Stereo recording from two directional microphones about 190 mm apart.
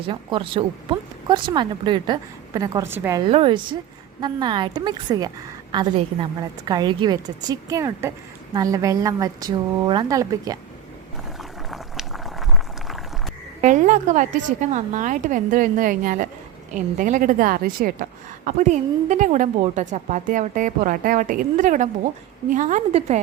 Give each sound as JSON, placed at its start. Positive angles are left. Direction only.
{"t": 0.0, "sound": "speech", "side_deg": -25}
{"t": 3.2, "sound": "speech", "side_deg": -30}
{"t": 11.7, "sound": "boiling", "side_deg": 0}
{"t": 13.6, "sound": "a woman's voice", "side_deg": -40}